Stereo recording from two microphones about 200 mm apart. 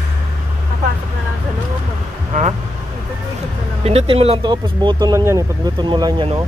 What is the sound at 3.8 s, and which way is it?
Speech, 30° right (ahead or behind).